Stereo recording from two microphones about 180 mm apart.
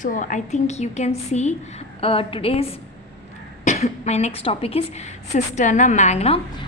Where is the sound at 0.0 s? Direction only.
45° left (ahead or behind).